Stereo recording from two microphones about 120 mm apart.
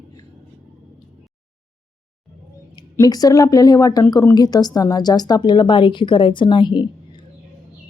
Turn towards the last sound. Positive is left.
turn(degrees=40)  # may be behind; listen again after turning